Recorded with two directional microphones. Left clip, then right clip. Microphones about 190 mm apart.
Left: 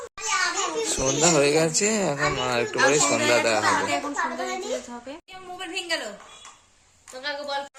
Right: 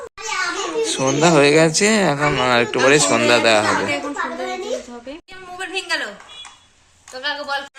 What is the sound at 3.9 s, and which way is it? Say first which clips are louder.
Speech: right 3 dB; 50° left (ahead or behind).